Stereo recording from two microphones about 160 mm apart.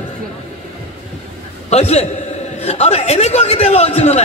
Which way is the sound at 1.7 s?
45° left (ahead or behind).